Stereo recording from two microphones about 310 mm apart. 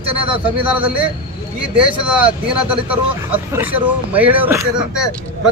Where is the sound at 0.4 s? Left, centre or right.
Centre.